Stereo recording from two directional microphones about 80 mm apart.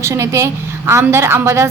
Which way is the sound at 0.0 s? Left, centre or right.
Right.